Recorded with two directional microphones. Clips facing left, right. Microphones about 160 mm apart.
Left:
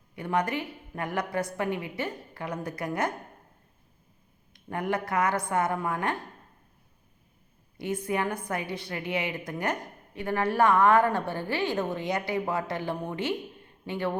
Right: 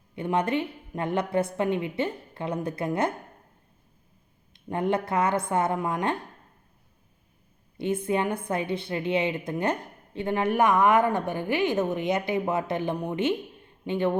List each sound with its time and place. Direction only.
0.2 s a woman's voice: 25° right (ahead or behind)
4.5 s a woman's voice: 25° right (ahead or behind)
8.0 s a woman's voice: 25° right (ahead or behind)